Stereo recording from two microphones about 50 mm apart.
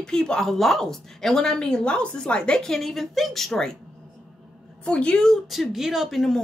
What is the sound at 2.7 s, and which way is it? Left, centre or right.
A woman's voice, centre.